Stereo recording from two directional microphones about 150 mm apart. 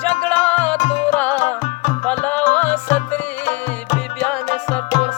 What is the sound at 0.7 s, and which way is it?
Music, 50° left (ahead or behind).